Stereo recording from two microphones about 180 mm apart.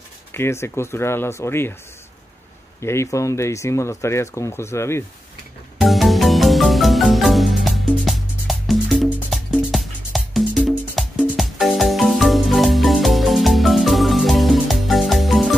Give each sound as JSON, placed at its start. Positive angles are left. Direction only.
{"t": 0.3, "sound": "speech", "side_deg": 15}
{"t": 2.8, "sound": "speech", "side_deg": 15}
{"t": 5.8, "sound": "marimba", "side_deg": 0}